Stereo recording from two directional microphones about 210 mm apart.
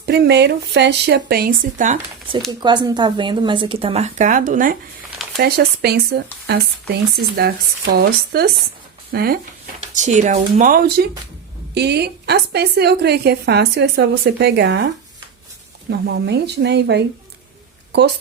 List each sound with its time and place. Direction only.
0.0 s a woman's voice: 50° right (ahead or behind)
2.5 s a woman's voice: 20° right (ahead or behind); by 9.4 s 45° right (ahead or behind)
9.9 s a woman's voice: 35° right (ahead or behind); by 14.8 s 55° right (ahead or behind)
15.9 s a woman's voice: 55° right (ahead or behind)